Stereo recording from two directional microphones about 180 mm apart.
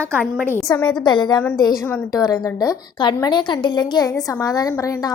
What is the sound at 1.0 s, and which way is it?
Speech, 25° left (ahead or behind).